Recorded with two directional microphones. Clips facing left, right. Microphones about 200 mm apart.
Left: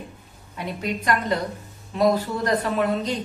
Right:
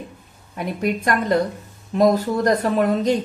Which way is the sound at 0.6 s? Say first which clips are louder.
Right 5 dB; 50° right (ahead or behind).